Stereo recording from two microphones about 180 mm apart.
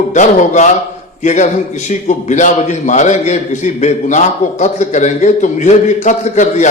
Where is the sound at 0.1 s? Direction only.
40° left (ahead or behind).